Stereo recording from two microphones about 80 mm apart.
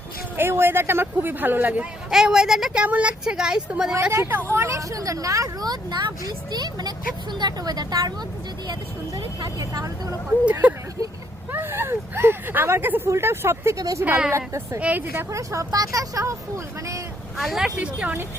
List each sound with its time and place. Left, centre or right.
0.3 s speech: right
1.8 s speech: centre
2.8 s speech: centre
4.1 s speech: right
10.5 s speech: centre
13.7 s speech: right
14.8 s speech: right
15.3 s speech: right
17.3 s speech: centre
17.7 s speech: right